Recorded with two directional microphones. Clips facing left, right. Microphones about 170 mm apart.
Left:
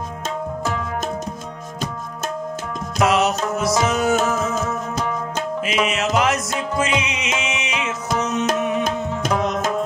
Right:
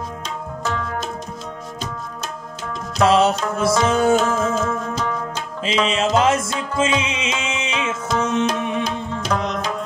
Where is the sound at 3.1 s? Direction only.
30° right (ahead or behind).